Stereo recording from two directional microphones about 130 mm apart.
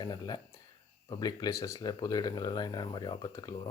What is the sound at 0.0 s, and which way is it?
Speech, 35° left (ahead or behind).